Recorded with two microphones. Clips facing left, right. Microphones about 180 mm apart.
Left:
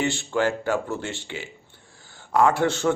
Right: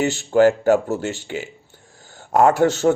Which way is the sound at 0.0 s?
40° right (ahead or behind).